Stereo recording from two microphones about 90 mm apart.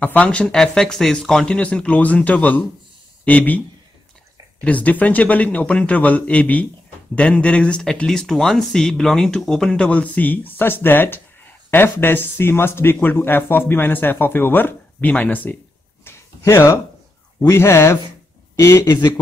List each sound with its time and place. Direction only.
0.0 s speech: 15° left (ahead or behind)
16.0 s a sound: 30° left (ahead or behind)
17.4 s speech: 30° left (ahead or behind)